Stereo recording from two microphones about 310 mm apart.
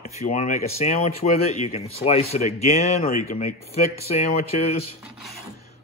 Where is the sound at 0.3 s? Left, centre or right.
Left.